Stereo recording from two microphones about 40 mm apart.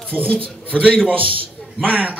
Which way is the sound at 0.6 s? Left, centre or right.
Right.